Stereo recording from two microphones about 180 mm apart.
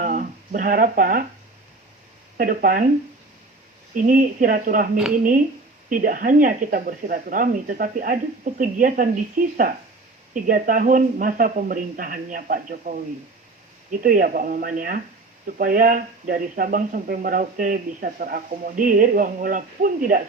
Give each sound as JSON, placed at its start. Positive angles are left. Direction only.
{"t": 0.0, "sound": "a sound", "side_deg": -45}
{"t": 2.4, "sound": "speech", "side_deg": -50}
{"t": 3.9, "sound": "speech", "side_deg": -45}
{"t": 5.9, "sound": "speech", "side_deg": -50}
{"t": 14.0, "sound": "speech", "side_deg": -50}